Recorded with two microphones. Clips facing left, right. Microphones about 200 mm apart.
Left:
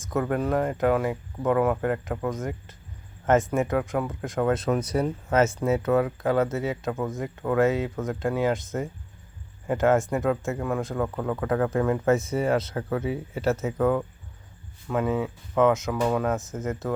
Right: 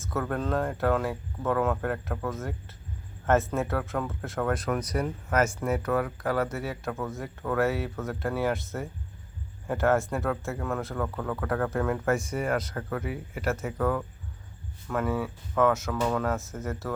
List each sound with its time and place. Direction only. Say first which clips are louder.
0.0 s speech: left 4 dB; 15° left (ahead or behind)
12.0 s speech: left 5 dB; 25° left (ahead or behind)